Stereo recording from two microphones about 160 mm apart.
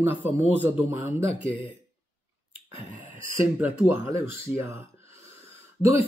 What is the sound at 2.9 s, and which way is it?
Speech, 10° right (ahead or behind).